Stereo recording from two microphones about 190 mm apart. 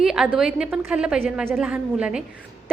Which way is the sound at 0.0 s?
5° right (ahead or behind).